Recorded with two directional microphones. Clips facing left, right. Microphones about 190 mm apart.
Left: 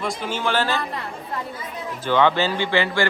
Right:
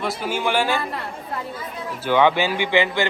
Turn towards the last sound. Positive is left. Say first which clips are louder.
# right 1 dB
turn(degrees=-15)  # may be behind; listen again after turning